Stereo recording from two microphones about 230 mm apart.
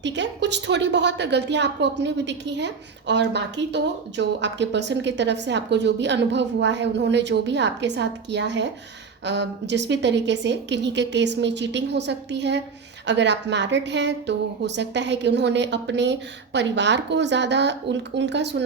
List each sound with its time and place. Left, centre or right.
0.0 s a woman's voice: right